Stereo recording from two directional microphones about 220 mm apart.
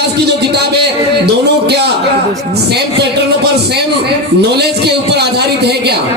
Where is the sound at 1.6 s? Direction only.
50° right (ahead or behind).